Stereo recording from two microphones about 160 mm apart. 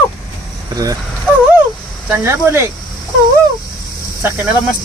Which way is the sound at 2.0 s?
15° right (ahead or behind).